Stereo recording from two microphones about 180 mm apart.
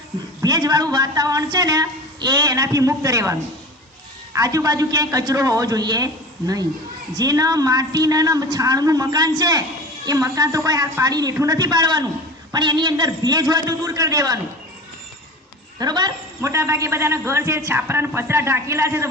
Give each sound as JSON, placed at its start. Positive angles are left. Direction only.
{"t": 0.4, "sound": "a woman's voice", "side_deg": -20}
{"t": 4.4, "sound": "a woman's voice", "side_deg": -20}
{"t": 7.1, "sound": "a woman's voice", "side_deg": -20}
{"t": 15.8, "sound": "a man's voice", "side_deg": -20}